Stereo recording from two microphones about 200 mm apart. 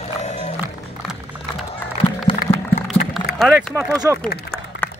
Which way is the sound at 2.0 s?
25° left (ahead or behind).